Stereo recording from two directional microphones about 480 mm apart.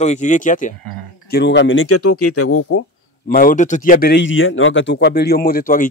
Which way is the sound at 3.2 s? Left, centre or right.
Centre.